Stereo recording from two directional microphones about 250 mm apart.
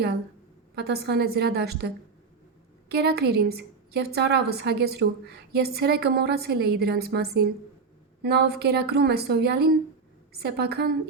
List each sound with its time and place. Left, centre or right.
0.8 s a woman's voice: right
2.9 s a woman's voice: right